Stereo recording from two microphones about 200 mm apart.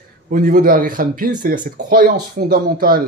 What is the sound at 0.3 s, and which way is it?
Speech, 45° right (ahead or behind).